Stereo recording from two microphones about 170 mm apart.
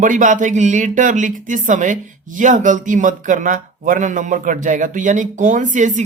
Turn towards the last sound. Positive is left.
turn(degrees=-45)  # may be behind; listen again after turning